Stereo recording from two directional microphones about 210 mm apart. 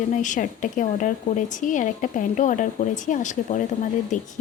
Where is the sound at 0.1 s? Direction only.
35° left (ahead or behind).